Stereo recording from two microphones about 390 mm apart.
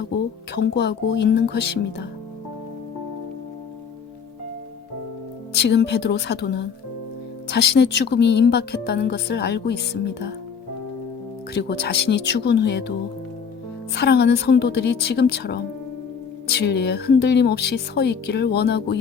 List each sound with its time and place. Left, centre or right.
0.5 s speech: left
5.5 s speech: left
7.9 s speech: left
11.5 s speech: left
13.9 s speech: left